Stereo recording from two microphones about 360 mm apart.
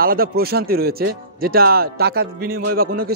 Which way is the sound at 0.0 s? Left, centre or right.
Right.